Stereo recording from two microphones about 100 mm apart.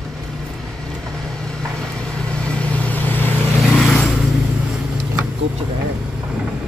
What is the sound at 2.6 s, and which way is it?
Vehicle, 15° left (ahead or behind).